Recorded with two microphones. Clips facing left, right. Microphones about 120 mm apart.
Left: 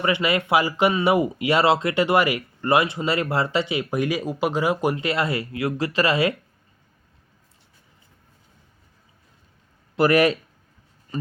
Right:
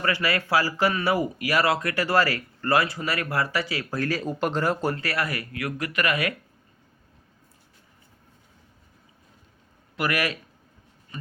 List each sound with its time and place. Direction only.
0.0 s speech: 20° left (ahead or behind)
10.0 s speech: 30° left (ahead or behind)
11.1 s music: 35° left (ahead or behind)